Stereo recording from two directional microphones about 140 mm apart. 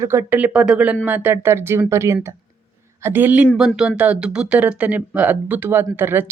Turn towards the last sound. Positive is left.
turn(degrees=-15)  # may be behind; listen again after turning